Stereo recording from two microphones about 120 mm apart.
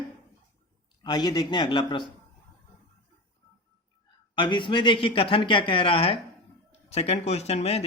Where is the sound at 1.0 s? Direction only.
35° left (ahead or behind).